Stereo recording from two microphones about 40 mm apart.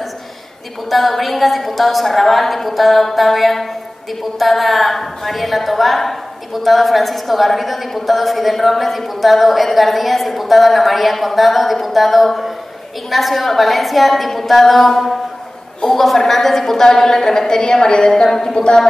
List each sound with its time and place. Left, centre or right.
0.8 s a woman's voice: centre; by 18.8 s left